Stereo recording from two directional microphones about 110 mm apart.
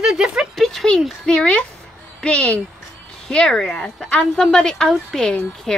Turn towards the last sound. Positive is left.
turn(degrees=5)  # may be behind; listen again after turning